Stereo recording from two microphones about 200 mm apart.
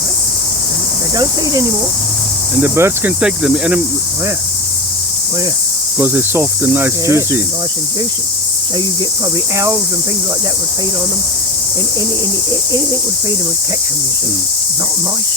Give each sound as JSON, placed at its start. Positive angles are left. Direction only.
{"t": 1.1, "sound": "cricket", "side_deg": -20}
{"t": 6.0, "sound": "cricket", "side_deg": -10}